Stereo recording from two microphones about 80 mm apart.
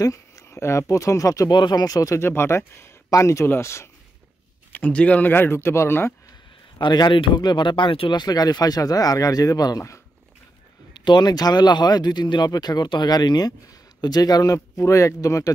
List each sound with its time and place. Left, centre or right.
0.0 s speech: left
1.6 s speech: left
4.7 s a man's voice: centre
6.8 s speech: left
10.9 s speech: left